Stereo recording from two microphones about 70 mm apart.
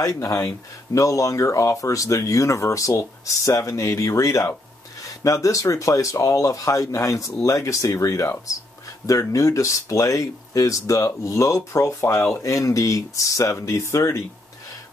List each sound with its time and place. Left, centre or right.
0.0 s speech: left